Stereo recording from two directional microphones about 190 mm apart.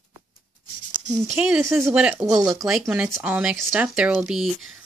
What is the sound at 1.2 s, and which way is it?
Speech, centre (ahead or behind).